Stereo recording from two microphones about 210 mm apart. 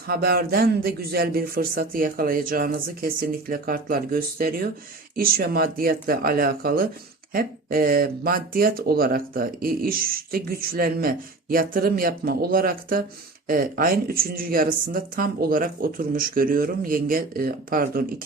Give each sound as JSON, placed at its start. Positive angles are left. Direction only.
{"t": 0.1, "sound": "speech", "side_deg": -45}